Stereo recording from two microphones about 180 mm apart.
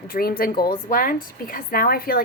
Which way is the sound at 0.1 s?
55° left (ahead or behind).